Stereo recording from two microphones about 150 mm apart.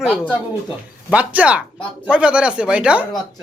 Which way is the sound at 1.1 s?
10° right (ahead or behind).